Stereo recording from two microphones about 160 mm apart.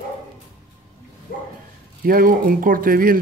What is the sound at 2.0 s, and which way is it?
Speech, 65° right (ahead or behind).